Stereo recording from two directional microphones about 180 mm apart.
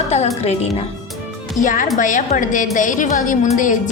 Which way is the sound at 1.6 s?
45° left (ahead or behind).